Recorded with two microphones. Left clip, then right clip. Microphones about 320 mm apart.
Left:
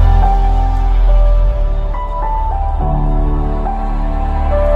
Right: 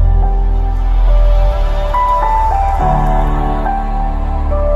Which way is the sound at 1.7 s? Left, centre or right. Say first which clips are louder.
Right 7 dB; right.